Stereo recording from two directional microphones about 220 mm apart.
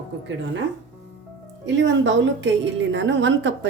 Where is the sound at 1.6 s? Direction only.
55° right (ahead or behind).